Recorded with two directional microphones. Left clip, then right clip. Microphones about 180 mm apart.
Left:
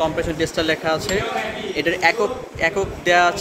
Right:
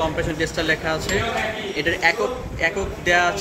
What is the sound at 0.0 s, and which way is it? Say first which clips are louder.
Speech: left 2 dB; 65° left (ahead or behind).